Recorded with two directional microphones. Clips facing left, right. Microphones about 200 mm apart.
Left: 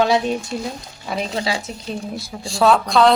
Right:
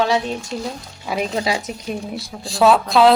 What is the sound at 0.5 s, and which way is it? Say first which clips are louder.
Speech: even; 10° left (ahead or behind).